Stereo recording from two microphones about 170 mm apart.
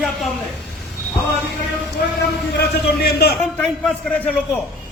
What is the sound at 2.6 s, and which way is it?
Speech, 70° left (ahead or behind).